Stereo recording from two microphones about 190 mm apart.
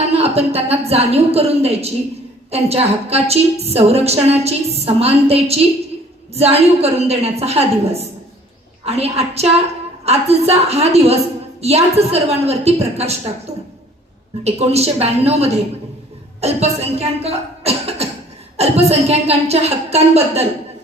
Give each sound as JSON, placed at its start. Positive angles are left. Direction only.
{"t": 0.0, "sound": "a woman's voice", "side_deg": -35}
{"t": 14.4, "sound": "a woman's voice", "side_deg": -35}